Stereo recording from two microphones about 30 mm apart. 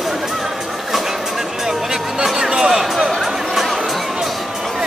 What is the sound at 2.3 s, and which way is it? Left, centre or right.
Music, centre.